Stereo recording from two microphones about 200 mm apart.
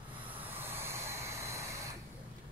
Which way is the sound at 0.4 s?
10° right (ahead or behind).